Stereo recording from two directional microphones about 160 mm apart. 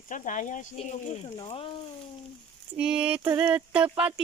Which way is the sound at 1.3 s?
35° left (ahead or behind).